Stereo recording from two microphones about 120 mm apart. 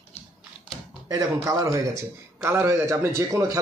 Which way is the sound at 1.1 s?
30° right (ahead or behind).